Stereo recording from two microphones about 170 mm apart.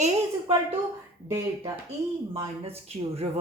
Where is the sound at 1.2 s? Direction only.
20° right (ahead or behind).